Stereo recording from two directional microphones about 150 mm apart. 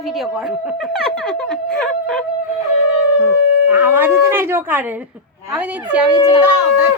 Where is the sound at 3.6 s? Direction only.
10° right (ahead or behind).